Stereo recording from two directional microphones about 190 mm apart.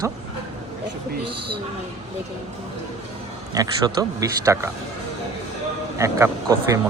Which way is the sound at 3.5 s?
20° right (ahead or behind).